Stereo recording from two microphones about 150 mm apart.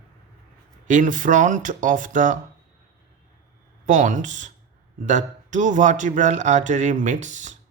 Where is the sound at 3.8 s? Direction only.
55° right (ahead or behind).